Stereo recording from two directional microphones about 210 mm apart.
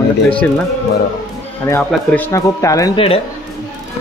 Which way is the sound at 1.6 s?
10° left (ahead or behind).